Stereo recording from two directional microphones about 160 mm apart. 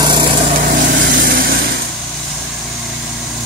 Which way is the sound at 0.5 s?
60° right (ahead or behind).